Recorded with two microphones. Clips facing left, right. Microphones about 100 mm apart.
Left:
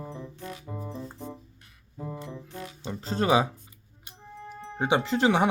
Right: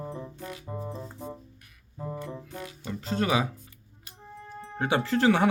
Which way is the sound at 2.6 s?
30° left (ahead or behind).